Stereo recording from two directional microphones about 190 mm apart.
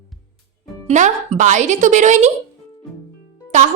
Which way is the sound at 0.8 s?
40° right (ahead or behind).